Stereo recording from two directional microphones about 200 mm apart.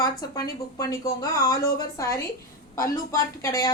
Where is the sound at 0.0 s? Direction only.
20° left (ahead or behind).